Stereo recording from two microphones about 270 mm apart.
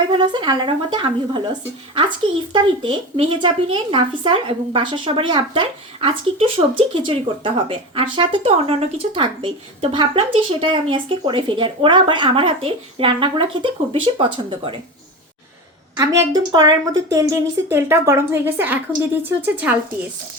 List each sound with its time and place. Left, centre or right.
0.1 s speech: centre
16.0 s speech: centre